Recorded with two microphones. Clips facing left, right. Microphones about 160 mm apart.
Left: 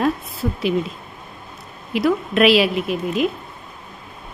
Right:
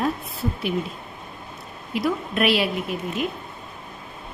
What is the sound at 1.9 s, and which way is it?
A woman's voice, 90° left.